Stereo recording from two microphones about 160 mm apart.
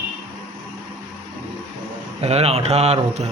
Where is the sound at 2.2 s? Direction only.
40° right (ahead or behind).